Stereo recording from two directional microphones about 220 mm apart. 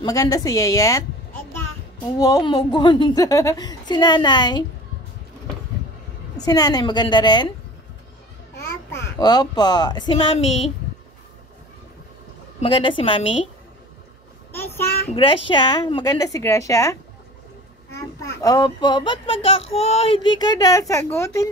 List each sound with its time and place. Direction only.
0.0 s a woman's voice: 15° left (ahead or behind)
2.1 s a child's voice: 15° left (ahead or behind)
6.4 s a child's voice: 15° left (ahead or behind)
8.9 s a child's voice: 20° left (ahead or behind)
12.5 s a child's voice: 25° left (ahead or behind)
14.5 s child singing: 10° left (ahead or behind)
15.1 s a woman's voice: 25° left (ahead or behind)
17.9 s a child's voice: 15° left (ahead or behind)